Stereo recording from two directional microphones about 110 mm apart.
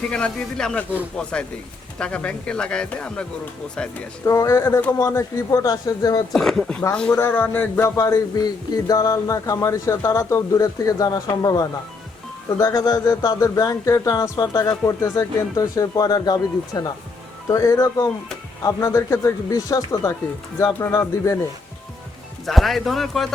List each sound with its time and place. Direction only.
0.1 s speech: 5° left (ahead or behind)
4.3 s speech: 30° left (ahead or behind)
6.3 s speech: 5° left (ahead or behind)
7.2 s speech: 20° left (ahead or behind)
8.0 s speech: 35° left (ahead or behind)
22.4 s speech: centre (ahead or behind)